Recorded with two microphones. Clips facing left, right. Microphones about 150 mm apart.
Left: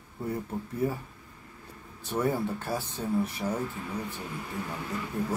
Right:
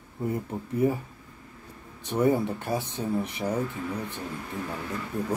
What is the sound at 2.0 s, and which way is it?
Speech, 20° right (ahead or behind).